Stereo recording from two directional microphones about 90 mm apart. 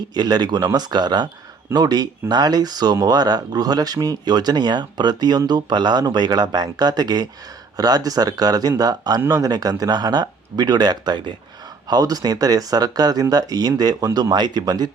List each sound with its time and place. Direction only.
0.1 s speech: 50° right (ahead or behind)